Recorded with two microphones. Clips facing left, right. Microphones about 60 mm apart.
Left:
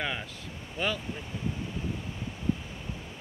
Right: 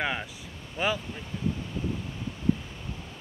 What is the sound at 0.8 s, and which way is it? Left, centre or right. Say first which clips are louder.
Speech: right 3 dB; centre.